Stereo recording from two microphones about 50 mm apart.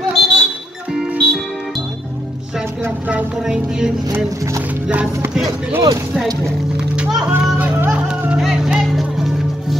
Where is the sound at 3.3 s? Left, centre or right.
Centre.